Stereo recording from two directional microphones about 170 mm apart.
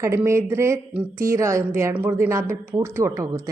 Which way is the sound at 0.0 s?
15° right (ahead or behind).